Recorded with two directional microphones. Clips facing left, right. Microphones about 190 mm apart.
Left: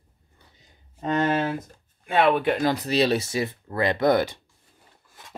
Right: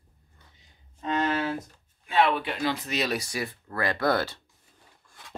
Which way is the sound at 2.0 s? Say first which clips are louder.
Left 4 dB; 55° left (ahead or behind).